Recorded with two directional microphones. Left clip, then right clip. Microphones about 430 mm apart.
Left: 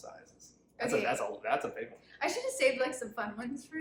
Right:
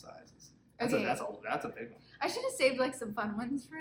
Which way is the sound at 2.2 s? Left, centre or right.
Centre.